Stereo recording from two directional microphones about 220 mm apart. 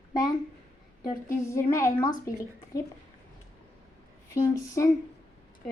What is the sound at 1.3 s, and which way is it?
Speech, 15° left (ahead or behind).